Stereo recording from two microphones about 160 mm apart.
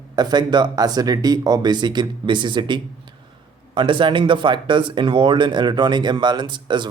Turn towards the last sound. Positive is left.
turn(degrees=-30)  # may be behind; listen again after turning